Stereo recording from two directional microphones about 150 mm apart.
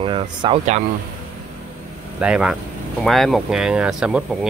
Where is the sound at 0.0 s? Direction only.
35° right (ahead or behind).